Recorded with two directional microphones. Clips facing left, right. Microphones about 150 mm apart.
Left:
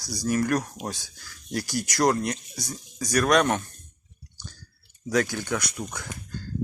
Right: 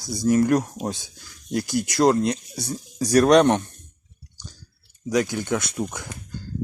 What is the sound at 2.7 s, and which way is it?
Speech, 35° right (ahead or behind).